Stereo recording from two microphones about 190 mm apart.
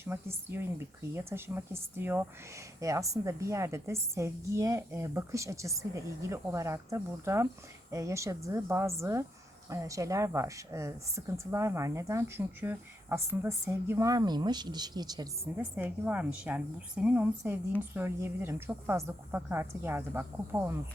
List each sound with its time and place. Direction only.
0.0 s a woman's voice: 10° right (ahead or behind)
15.5 s a woman's voice: 10° right (ahead or behind)